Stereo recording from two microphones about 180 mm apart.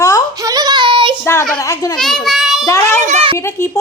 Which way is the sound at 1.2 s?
15° left (ahead or behind).